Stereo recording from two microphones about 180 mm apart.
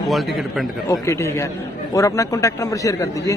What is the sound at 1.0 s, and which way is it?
Speech, 15° left (ahead or behind).